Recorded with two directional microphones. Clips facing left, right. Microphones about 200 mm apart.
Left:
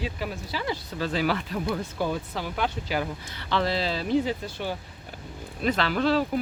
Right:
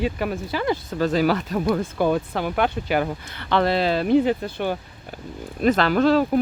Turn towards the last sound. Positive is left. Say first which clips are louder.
# right 6 dB
turn(degrees=-50)  # may be behind; listen again after turning